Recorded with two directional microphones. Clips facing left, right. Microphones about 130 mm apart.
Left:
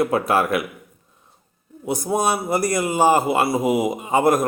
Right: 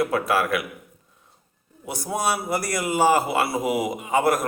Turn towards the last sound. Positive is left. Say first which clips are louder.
# left 3 dB
turn(degrees=20)  # may be behind; listen again after turning